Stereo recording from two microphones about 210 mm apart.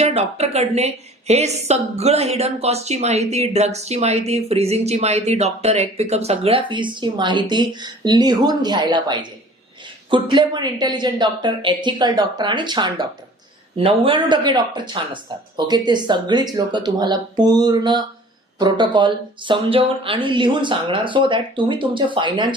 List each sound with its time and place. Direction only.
0.0 s a woman's voice: 30° right (ahead or behind)